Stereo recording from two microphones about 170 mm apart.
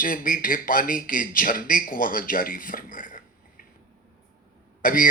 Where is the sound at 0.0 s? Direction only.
55° left (ahead or behind).